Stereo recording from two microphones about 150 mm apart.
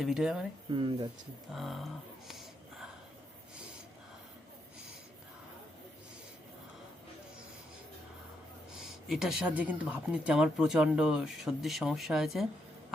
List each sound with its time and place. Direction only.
0.0 s speech: 5° right (ahead or behind)
0.7 s speech: 30° right (ahead or behind)
1.5 s a sound: centre (ahead or behind)
9.0 s speech: 5° right (ahead or behind)